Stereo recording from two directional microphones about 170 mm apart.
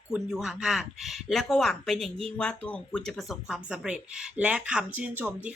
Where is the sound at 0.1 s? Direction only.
5° right (ahead or behind).